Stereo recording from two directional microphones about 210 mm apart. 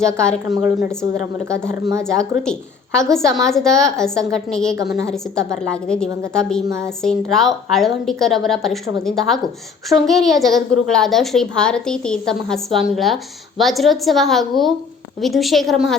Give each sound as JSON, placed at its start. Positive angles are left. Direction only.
{"t": 0.2, "sound": "a woman's voice", "side_deg": 5}
{"t": 1.0, "sound": "a woman's voice", "side_deg": 70}
{"t": 1.6, "sound": "a woman's voice", "side_deg": -15}
{"t": 2.0, "sound": "a woman's voice", "side_deg": 5}
{"t": 6.7, "sound": "a woman's voice", "side_deg": -15}
{"t": 7.0, "sound": "a woman's voice", "side_deg": 0}